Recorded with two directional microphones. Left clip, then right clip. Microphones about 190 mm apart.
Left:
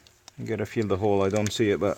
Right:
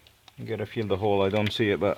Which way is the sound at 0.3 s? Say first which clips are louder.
Left 2 dB; 35° left (ahead or behind).